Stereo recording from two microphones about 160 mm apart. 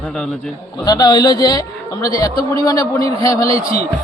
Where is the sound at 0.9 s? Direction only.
25° left (ahead or behind).